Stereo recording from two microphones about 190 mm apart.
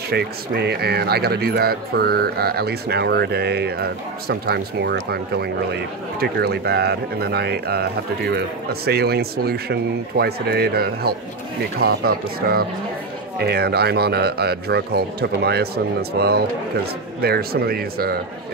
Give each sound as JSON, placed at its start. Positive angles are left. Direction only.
{"t": 0.1, "sound": "speech", "side_deg": -55}